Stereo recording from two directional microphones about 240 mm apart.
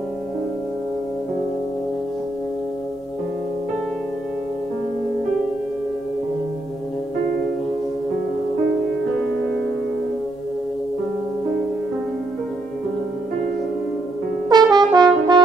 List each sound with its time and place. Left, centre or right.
14.5 s brass instrument: centre